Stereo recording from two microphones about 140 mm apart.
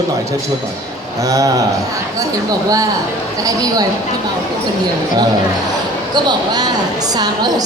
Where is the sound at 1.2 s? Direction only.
25° right (ahead or behind).